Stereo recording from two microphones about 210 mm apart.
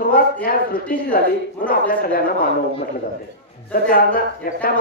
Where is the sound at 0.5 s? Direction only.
40° left (ahead or behind).